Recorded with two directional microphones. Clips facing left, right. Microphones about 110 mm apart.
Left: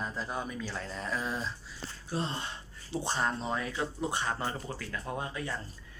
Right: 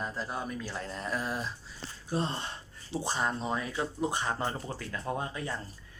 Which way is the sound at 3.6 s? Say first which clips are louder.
Right 1 dB; 25° right (ahead or behind).